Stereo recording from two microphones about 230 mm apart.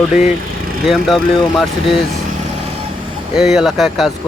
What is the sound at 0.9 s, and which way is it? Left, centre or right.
Speech, centre.